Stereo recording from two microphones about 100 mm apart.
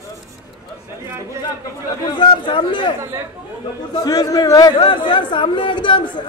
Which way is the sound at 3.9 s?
40° left (ahead or behind).